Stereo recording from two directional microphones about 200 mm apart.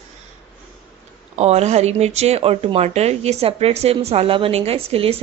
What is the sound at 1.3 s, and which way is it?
Speech, 35° right (ahead or behind).